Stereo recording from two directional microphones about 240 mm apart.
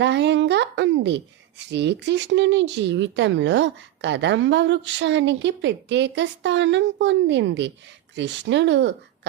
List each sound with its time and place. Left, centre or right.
0.0 s a woman's voice: right